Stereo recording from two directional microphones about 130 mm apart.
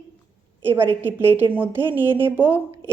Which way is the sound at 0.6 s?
20° right (ahead or behind).